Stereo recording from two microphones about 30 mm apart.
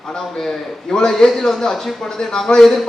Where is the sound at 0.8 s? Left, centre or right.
Left.